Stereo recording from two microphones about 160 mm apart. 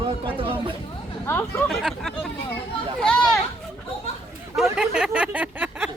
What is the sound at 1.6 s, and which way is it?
Speech, centre (ahead or behind).